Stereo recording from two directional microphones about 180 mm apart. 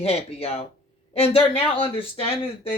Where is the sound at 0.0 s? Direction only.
35° left (ahead or behind).